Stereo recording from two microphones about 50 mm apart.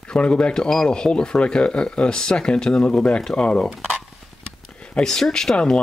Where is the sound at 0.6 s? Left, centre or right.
Centre.